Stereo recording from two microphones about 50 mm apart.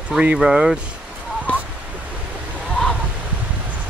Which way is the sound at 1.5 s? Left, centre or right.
Left.